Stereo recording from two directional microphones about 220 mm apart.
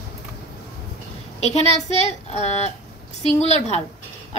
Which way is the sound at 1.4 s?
30° left (ahead or behind).